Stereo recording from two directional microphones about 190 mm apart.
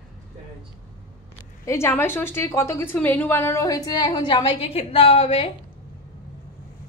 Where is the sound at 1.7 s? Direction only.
15° left (ahead or behind); by 5.5 s 30° left (ahead or behind).